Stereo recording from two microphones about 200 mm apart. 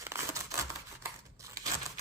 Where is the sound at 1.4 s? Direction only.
15° right (ahead or behind).